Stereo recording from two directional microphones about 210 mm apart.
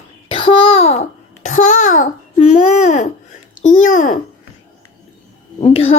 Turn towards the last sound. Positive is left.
turn(degrees=30)  # may be behind; listen again after turning